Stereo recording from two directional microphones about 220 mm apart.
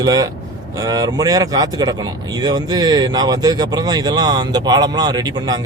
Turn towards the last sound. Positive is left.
turn(degrees=-20)  # may be behind; listen again after turning